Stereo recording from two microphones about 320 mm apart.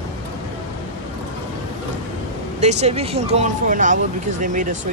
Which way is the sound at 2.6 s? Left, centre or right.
Centre.